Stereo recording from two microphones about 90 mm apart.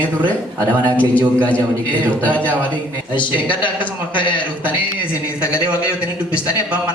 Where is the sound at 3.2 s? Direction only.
65° left (ahead or behind).